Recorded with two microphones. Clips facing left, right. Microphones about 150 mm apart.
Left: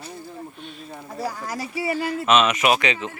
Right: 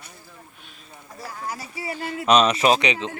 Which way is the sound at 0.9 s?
70° left (ahead or behind).